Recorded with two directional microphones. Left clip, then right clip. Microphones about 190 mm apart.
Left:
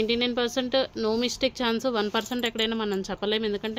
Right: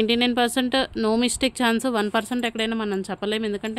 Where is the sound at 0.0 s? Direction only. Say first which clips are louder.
Right 4 dB; 45° right (ahead or behind).